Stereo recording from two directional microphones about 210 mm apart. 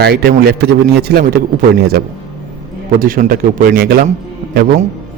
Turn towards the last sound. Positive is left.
turn(degrees=-45)  # may be behind; listen again after turning